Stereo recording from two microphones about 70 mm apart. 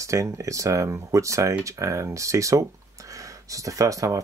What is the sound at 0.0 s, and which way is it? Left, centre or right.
Speech, right.